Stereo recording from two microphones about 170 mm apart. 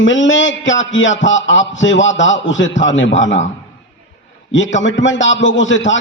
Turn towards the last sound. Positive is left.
turn(degrees=90)